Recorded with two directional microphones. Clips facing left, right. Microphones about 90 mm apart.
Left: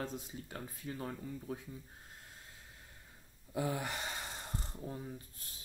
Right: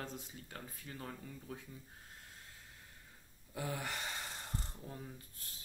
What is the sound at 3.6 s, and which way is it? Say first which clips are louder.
Speech: left 5 dB; 20° left (ahead or behind).